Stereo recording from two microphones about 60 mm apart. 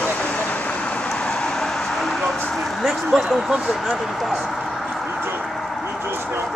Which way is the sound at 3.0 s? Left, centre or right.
Centre.